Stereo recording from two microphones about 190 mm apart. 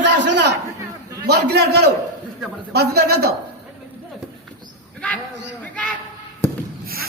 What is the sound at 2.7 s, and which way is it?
Speech, 60° right (ahead or behind).